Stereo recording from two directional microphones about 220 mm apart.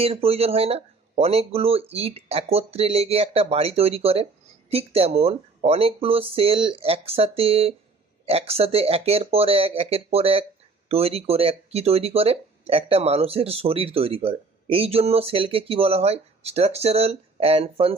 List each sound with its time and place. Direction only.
0.0 s speech: 25° right (ahead or behind)